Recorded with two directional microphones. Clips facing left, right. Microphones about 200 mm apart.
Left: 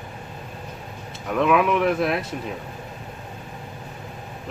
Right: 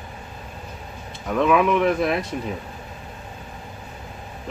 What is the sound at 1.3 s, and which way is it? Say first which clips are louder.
Speech: right 1 dB; 5° left (ahead or behind).